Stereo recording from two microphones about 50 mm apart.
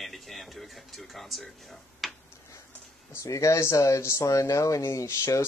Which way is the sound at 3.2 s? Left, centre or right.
Left.